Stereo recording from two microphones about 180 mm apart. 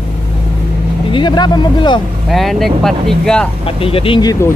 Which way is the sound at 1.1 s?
25° left (ahead or behind).